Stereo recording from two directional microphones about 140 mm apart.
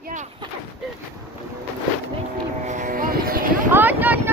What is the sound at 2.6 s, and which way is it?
Vehicle, 60° right (ahead or behind).